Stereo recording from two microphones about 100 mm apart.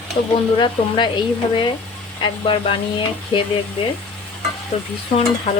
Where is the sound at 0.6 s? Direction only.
50° left (ahead or behind).